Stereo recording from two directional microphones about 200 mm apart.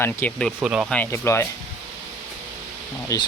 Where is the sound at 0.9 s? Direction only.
10° left (ahead or behind).